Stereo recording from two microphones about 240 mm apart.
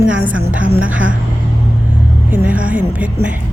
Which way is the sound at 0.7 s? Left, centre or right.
Centre.